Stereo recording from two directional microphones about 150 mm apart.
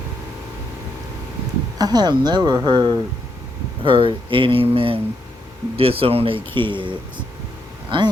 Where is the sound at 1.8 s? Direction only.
25° right (ahead or behind).